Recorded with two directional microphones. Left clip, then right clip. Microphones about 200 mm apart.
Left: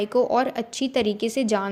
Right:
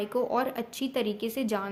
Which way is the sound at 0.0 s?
20° left (ahead or behind).